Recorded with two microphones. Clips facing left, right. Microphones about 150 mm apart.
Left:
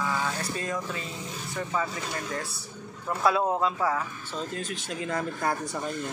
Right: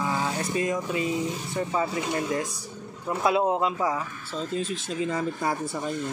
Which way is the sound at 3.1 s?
20° right (ahead or behind).